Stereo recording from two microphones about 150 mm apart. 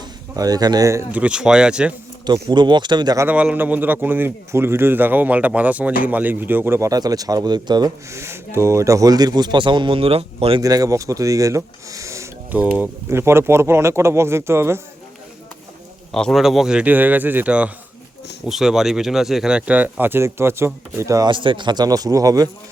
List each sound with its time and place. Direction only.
0.3 s speech: 25° right (ahead or behind)
1.2 s speech: 5° right (ahead or behind)
2.2 s speech: 30° right (ahead or behind)
3.2 s speech: 10° right (ahead or behind); by 10.6 s 40° right (ahead or behind)
10.6 s speech: 25° right (ahead or behind)
16.1 s speech: centre (ahead or behind); by 21.2 s 20° right (ahead or behind)
21.2 s speech: 35° right (ahead or behind)